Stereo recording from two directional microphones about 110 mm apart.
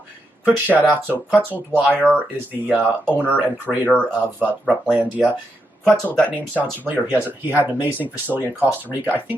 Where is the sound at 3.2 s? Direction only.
15° right (ahead or behind).